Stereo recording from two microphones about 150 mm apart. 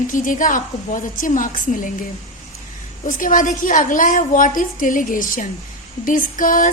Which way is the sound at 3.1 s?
60° left (ahead or behind).